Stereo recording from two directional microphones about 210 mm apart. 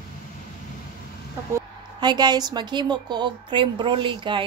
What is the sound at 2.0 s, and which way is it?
A woman's voice, 20° right (ahead or behind).